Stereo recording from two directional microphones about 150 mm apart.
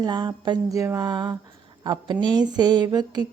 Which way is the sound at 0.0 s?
30° right (ahead or behind).